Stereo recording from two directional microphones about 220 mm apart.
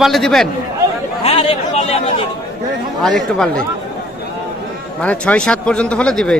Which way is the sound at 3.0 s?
5° left (ahead or behind).